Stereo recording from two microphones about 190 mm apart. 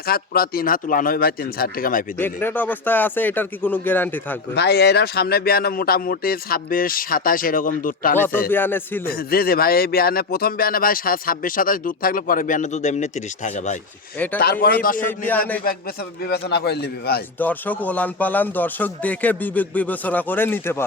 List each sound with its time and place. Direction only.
0.0 s speech: 50° left (ahead or behind)
2.2 s speech: 10° left (ahead or behind)
4.5 s speech: 60° left (ahead or behind)
8.4 s speech: 10° left (ahead or behind)
9.0 s speech: 50° left (ahead or behind)
14.3 s speech: 55° left (ahead or behind)
15.0 s speech: 10° left (ahead or behind)
16.2 s a man's voice: 55° left (ahead or behind)
17.3 s speech: 10° left (ahead or behind)